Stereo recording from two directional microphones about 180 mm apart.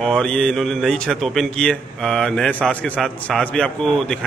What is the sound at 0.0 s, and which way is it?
A man's voice, 5° left (ahead or behind).